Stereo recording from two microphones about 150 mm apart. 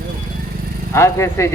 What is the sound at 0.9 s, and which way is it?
Speech, 20° left (ahead or behind).